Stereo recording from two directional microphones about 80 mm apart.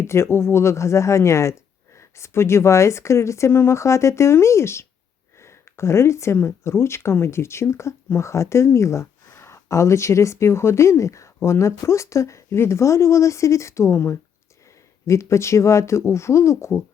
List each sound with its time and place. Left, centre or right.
0.0 s speech: left